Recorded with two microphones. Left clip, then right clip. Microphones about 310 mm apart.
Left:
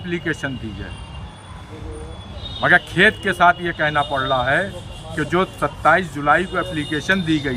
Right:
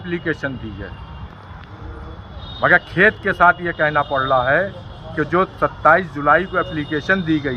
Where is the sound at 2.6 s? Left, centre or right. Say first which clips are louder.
Right 1 dB; centre.